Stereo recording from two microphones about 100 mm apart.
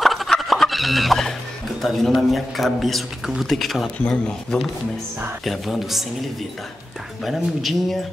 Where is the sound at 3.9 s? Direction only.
10° left (ahead or behind).